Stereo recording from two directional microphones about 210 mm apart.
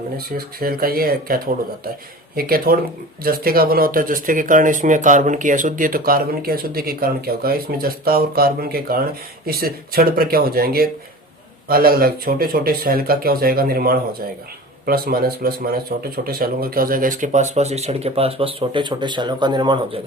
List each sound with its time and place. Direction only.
0.2 s speech: 45° right (ahead or behind); by 20.0 s 20° right (ahead or behind)